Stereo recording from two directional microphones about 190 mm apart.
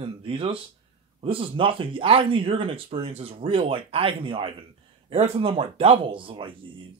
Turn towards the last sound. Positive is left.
turn(degrees=-25)  # may be behind; listen again after turning